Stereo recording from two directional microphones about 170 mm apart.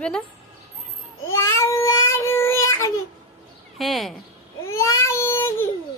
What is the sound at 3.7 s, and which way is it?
Speech, centre (ahead or behind).